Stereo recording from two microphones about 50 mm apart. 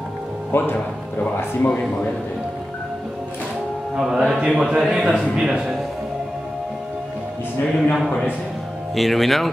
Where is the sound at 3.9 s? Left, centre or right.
Centre.